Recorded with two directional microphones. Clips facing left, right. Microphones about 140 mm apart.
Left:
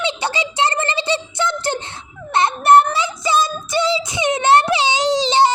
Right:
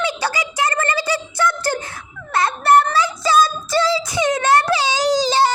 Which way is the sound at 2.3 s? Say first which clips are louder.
Left 2 dB; 25° left (ahead or behind).